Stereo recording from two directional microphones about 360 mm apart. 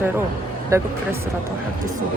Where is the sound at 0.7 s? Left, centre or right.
Centre.